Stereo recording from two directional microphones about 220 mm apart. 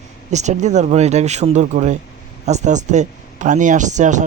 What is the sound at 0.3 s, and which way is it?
Speech, 30° right (ahead or behind).